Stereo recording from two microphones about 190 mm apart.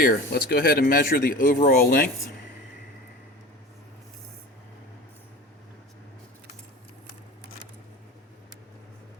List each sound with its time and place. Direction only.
0.0 s speech: 50° left (ahead or behind)